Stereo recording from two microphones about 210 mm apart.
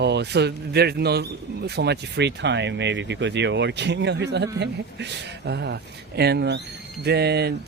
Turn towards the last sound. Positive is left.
turn(degrees=-50)  # may be behind; listen again after turning